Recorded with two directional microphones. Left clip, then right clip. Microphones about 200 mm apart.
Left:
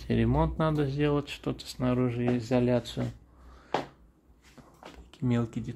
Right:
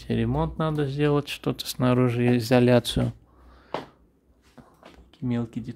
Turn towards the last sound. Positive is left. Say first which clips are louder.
# right 1 dB
turn(degrees=-10)  # may be behind; listen again after turning